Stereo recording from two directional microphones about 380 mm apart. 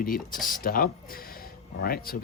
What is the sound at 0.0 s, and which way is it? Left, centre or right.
Speech, left.